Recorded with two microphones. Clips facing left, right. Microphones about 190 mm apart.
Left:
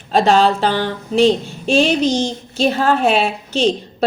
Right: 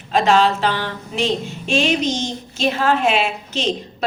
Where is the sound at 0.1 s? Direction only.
35° left (ahead or behind).